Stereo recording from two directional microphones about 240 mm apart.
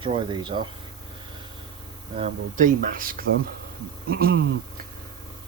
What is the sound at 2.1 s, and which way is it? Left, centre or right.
Speech, right.